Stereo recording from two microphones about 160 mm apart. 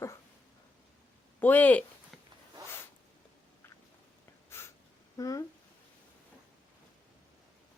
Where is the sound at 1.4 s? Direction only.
10° left (ahead or behind).